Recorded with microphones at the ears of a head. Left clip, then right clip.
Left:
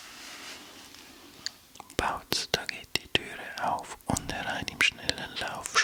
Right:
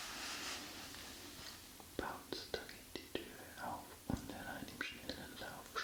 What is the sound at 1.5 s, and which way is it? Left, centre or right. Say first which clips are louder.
Whispering: left 13 dB; left.